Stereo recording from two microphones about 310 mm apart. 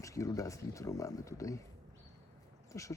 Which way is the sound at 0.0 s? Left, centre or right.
Centre.